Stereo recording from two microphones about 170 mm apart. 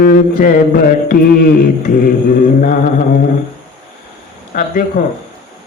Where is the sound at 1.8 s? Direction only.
55° left (ahead or behind).